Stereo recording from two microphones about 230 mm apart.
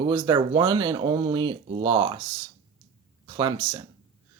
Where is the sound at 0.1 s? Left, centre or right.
Right.